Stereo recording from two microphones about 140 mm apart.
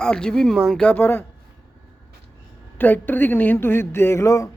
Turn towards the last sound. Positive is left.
turn(degrees=20)  # may be behind; listen again after turning